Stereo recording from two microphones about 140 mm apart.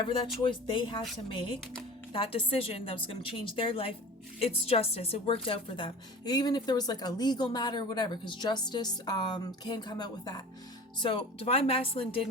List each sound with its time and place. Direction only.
0.4 s a woman's voice: 35° left (ahead or behind)
11.0 s speech: 40° left (ahead or behind)